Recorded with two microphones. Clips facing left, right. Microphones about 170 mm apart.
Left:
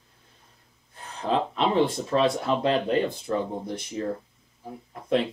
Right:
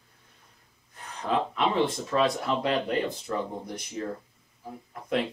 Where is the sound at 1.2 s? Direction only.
30° left (ahead or behind).